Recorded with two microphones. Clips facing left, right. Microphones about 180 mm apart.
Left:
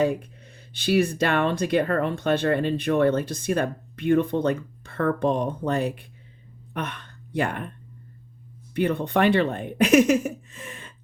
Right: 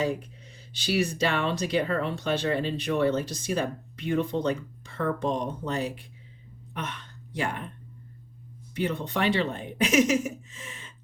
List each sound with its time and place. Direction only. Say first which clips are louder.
0.7 s speech: left 5 dB; 55° left (ahead or behind)
8.7 s speech: left 6 dB; 55° left (ahead or behind)